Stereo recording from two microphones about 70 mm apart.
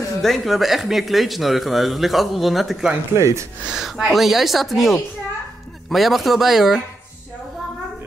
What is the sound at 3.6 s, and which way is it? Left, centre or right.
Speech, centre.